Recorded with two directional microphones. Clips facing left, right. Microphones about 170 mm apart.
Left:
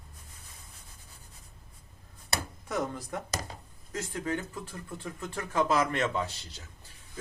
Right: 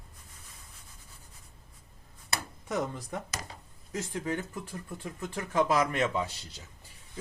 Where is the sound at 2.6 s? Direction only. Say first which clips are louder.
Right 1 dB; 15° right (ahead or behind).